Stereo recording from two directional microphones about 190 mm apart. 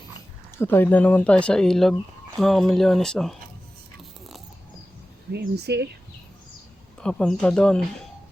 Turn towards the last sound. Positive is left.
turn(degrees=5)  # may be behind; listen again after turning